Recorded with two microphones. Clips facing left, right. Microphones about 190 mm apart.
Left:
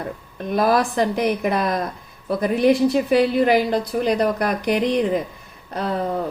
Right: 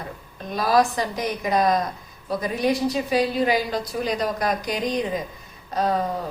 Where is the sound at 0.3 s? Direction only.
55° left (ahead or behind).